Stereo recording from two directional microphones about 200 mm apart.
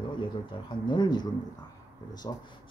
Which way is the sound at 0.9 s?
20° left (ahead or behind).